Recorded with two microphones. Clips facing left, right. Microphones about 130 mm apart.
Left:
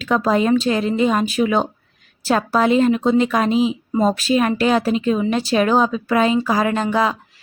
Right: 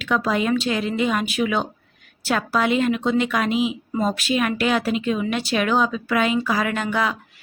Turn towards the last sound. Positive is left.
turn(degrees=35)  # may be behind; listen again after turning